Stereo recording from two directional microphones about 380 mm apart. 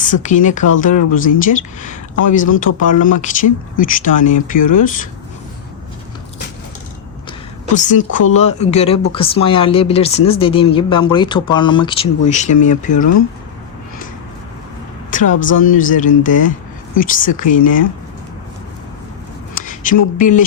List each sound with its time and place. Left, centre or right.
0.0 s speech: centre
2.5 s speech: left
2.9 s speech: centre
7.8 s speech: centre
12.9 s speech: left
15.1 s speech: centre
19.5 s a sound: left
20.1 s speech: centre